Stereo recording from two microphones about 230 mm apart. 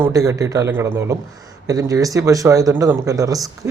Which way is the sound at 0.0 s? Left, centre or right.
Centre.